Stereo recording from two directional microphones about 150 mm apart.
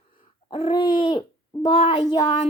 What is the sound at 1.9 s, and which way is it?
Child singing, 30° left (ahead or behind).